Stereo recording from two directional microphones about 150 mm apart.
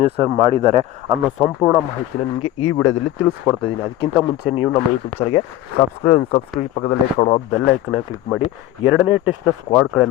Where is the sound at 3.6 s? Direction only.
35° left (ahead or behind).